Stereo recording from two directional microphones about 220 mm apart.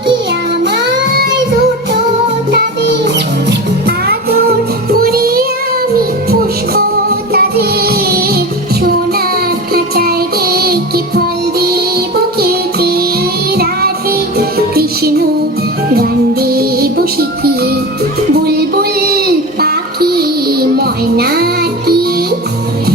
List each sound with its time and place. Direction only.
0.6 s music: 50° right (ahead or behind)
2.5 s music: 50° right (ahead or behind)
6.7 s music: 45° right (ahead or behind)
18.4 s child singing: 45° right (ahead or behind)